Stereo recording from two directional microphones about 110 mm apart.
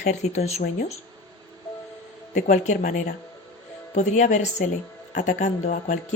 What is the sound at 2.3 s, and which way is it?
Speech, 90° left.